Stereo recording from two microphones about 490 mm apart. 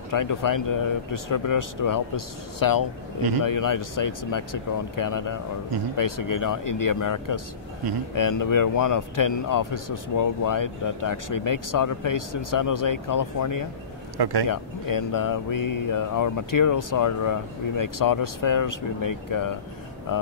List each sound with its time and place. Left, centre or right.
0.1 s speech: left
14.1 s speech: right
14.5 s speech: left